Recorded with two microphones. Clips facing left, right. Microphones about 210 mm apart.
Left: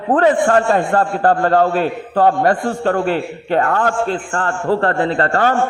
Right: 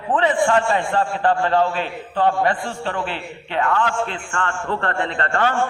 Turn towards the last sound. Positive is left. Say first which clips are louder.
# left 5 dB
turn(degrees=40)  # may be behind; listen again after turning